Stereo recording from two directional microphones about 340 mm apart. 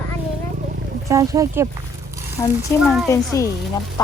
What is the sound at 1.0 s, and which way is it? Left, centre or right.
Speech, centre.